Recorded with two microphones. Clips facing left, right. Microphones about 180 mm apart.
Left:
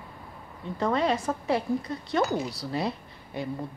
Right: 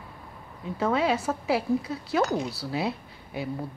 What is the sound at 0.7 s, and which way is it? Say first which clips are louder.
Speech: right 1 dB; 5° right (ahead or behind).